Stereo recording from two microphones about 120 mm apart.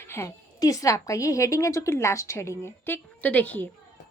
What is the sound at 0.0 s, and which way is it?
A woman's voice, 20° left (ahead or behind).